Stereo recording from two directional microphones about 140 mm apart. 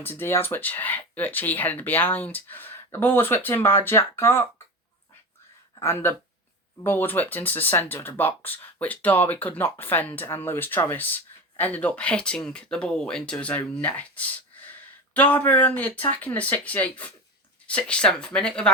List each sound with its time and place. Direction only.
0.0 s speech: 15° left (ahead or behind)
5.8 s speech: 15° left (ahead or behind)